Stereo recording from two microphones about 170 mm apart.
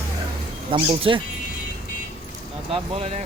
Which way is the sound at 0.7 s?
30° right (ahead or behind).